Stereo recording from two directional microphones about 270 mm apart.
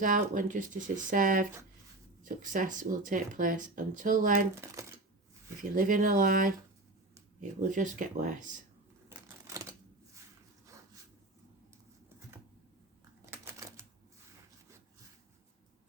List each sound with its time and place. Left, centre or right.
0.0 s speech: right
5.7 s speech: right
7.6 s speech: right
9.0 s a sound: centre
13.3 s typewriter: centre